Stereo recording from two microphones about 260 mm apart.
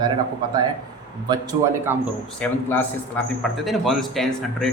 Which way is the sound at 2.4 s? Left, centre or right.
Centre.